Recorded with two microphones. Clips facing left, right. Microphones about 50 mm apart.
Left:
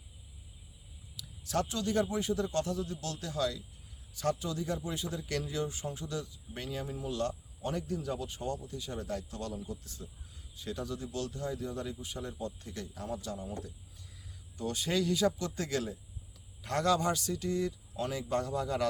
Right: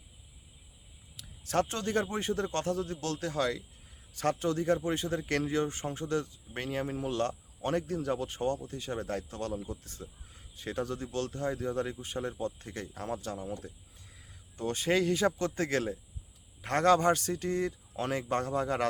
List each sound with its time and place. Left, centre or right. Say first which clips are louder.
1.1 s speech: right 3 dB; right
14.5 s speech: right 4 dB; right